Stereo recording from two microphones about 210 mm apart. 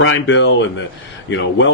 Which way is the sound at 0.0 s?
65° left (ahead or behind).